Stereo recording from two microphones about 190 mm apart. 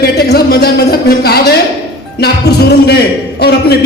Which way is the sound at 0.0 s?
55° left (ahead or behind).